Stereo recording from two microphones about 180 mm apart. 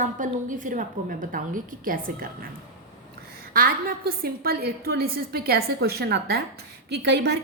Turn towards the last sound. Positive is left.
turn(degrees=-70)  # may be behind; listen again after turning